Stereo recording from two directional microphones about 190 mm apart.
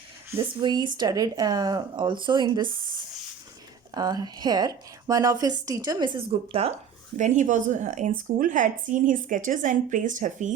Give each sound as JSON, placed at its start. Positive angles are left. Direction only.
{"t": 0.3, "sound": "a woman's voice", "side_deg": -25}
{"t": 3.9, "sound": "a woman's voice", "side_deg": -20}